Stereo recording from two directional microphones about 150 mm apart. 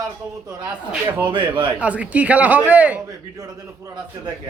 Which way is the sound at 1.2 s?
35° right (ahead or behind).